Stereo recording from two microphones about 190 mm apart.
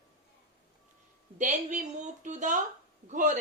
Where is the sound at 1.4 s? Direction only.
40° right (ahead or behind).